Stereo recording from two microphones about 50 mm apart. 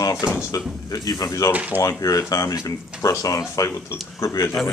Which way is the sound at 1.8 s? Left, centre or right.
Left.